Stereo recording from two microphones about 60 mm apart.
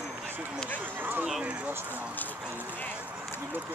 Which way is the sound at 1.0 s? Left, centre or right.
Right.